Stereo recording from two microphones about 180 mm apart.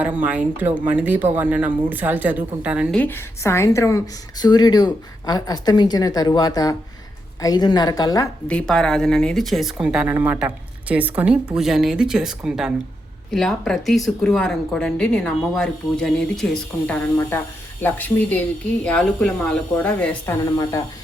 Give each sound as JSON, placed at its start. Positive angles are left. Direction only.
{"t": 0.0, "sound": "speech", "side_deg": -10}
{"t": 3.0, "sound": "speech", "side_deg": 15}
{"t": 8.4, "sound": "speech", "side_deg": 5}